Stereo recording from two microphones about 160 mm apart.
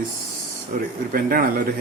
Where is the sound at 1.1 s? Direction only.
65° right (ahead or behind).